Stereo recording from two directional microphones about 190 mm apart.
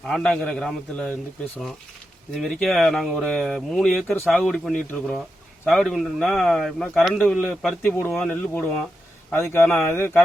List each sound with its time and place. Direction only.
0.1 s a man's voice: 5° left (ahead or behind)
2.3 s a man's voice: centre (ahead or behind)